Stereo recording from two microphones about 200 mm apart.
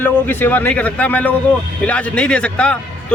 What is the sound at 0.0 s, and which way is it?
A man's voice, 10° left (ahead or behind).